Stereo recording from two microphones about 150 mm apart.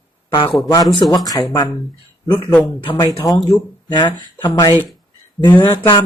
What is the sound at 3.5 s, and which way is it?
Speech, 30° left (ahead or behind).